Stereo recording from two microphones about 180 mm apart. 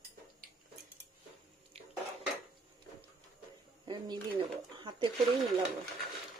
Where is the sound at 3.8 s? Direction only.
25° right (ahead or behind).